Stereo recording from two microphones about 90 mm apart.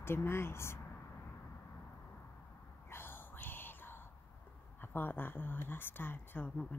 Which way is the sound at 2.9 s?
25° left (ahead or behind).